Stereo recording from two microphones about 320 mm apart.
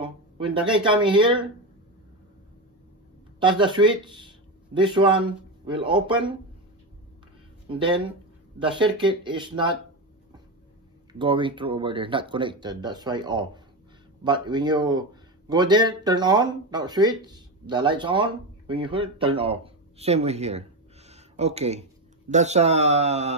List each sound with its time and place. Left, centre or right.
0.0 s speech: centre
3.3 s speech: centre
7.6 s speech: centre
11.1 s a man's voice: centre